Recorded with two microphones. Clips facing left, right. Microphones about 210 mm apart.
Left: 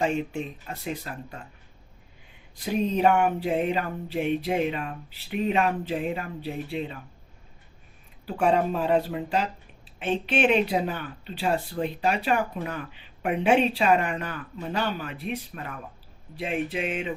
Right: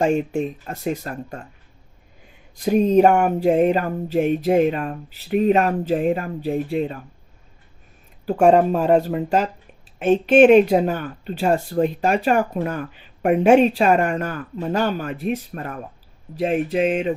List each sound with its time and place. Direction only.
0.0 s speech: 45° right (ahead or behind)
2.6 s speech: 45° right (ahead or behind)
8.3 s speech: 45° right (ahead or behind)